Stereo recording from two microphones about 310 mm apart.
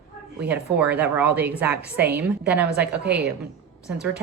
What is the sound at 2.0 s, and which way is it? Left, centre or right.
Speech, right.